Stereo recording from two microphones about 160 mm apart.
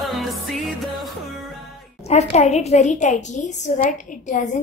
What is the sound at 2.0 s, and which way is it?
A woman's voice, 45° left (ahead or behind).